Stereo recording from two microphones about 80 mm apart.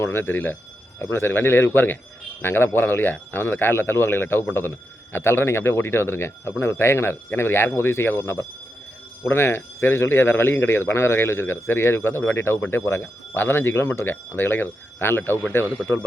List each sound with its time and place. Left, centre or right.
0.0 s a man's voice: left